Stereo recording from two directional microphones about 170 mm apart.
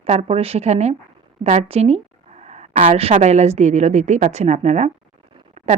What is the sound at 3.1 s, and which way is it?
A woman's voice, 40° right (ahead or behind).